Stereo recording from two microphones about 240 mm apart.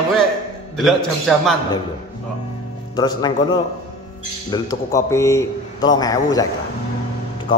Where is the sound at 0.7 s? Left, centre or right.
Centre.